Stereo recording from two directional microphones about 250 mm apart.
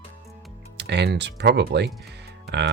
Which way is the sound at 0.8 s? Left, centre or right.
Right.